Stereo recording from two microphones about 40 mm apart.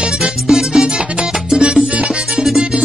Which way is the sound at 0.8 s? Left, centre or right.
Right.